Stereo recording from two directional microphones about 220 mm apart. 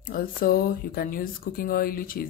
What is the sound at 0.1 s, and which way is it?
Speech, 40° left (ahead or behind).